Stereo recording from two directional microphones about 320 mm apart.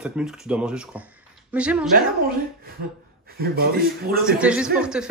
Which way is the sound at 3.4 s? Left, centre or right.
Right.